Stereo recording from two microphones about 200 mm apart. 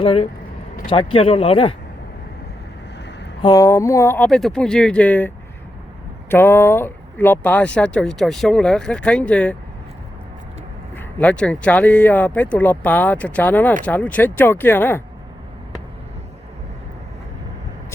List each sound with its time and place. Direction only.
0.0 s speech: 30° left (ahead or behind)
3.4 s speech: 15° left (ahead or behind)
6.3 s speech: 10° left (ahead or behind)
10.9 s speech: 5° left (ahead or behind)